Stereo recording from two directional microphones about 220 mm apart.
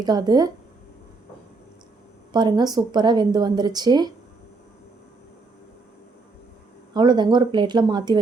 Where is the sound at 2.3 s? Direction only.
20° right (ahead or behind).